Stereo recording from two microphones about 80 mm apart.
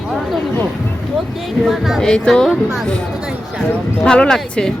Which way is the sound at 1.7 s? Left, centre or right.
Centre.